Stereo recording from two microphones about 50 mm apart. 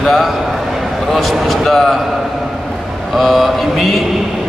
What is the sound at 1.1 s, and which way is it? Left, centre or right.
Speech, centre.